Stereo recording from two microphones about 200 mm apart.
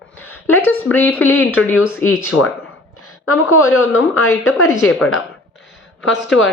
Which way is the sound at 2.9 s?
90° left.